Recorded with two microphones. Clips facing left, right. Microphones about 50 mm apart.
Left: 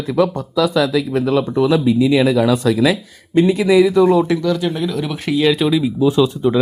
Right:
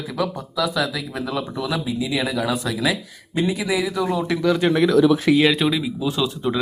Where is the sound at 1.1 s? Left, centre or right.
Centre.